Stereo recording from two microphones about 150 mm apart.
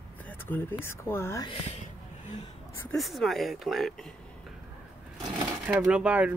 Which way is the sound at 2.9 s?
Centre (ahead or behind).